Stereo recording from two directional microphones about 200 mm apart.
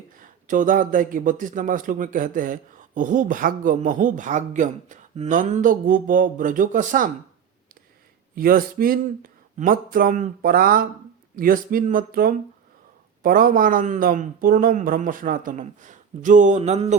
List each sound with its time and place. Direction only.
0.2 s a man's voice: 40° right (ahead or behind)
8.4 s a man's voice: 45° right (ahead or behind)